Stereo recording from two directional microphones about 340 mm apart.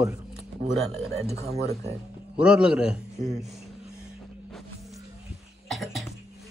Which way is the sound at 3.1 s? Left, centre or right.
Centre.